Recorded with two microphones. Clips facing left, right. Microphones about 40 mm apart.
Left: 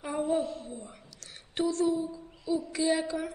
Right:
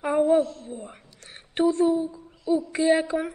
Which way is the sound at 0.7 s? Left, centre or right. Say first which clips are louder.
Right 5 dB; right.